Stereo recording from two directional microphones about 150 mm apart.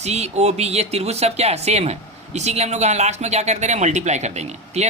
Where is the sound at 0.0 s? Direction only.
45° right (ahead or behind).